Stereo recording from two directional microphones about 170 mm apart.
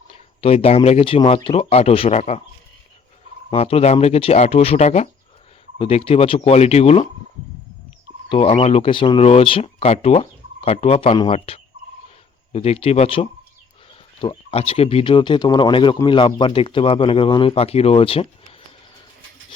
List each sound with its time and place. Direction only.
0.1 s speech: 35° left (ahead or behind)
3.5 s speech: 35° left (ahead or behind)
8.3 s speech: 30° left (ahead or behind)